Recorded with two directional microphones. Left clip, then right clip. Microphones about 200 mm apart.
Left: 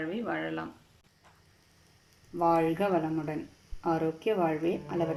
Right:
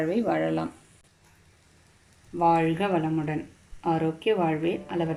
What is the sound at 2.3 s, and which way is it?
A woman's voice, centre (ahead or behind).